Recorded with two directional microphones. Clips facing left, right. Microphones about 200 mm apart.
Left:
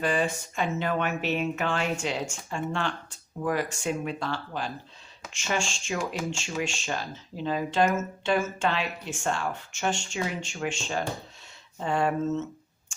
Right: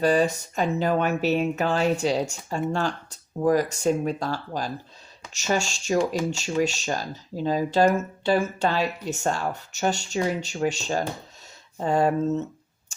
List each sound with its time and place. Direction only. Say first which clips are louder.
0.0 s speech: right 6 dB; 40° right (ahead or behind)